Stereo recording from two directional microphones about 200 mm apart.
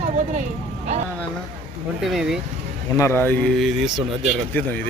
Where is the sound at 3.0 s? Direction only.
10° left (ahead or behind).